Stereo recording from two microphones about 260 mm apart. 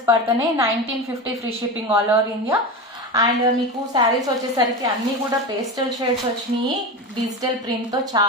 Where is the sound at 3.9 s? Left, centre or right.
Centre.